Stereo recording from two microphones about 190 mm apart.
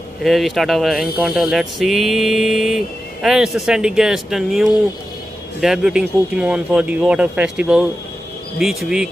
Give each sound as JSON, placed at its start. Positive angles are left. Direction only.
{"t": 0.2, "sound": "speech", "side_deg": 0}